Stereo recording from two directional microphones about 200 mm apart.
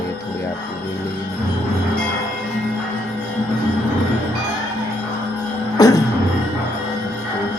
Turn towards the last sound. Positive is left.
turn(degrees=20)  # may be behind; listen again after turning